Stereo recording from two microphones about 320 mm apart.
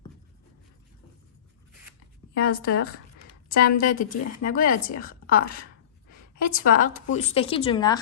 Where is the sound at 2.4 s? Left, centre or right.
Left.